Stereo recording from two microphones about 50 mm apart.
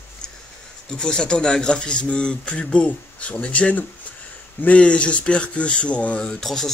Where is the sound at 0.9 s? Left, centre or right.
Centre.